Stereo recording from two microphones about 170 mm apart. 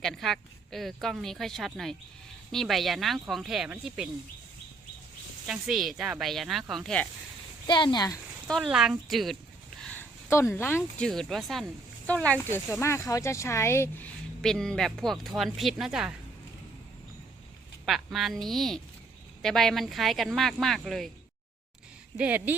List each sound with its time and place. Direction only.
0.0 s speech: centre (ahead or behind)
5.5 s speech: centre (ahead or behind)
7.7 s speech: 25° left (ahead or behind)
8.4 s speech: centre (ahead or behind)
9.8 s speech: 10° left (ahead or behind)
17.8 s speech: centre (ahead or behind)
22.2 s speech: 10° right (ahead or behind)